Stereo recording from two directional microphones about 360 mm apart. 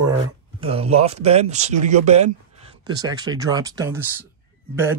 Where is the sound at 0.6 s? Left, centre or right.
Centre.